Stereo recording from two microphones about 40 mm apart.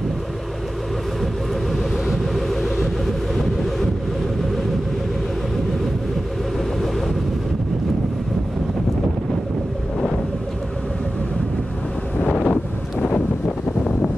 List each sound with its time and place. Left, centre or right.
1.2 s vehicle: centre
12.2 s wind noise: left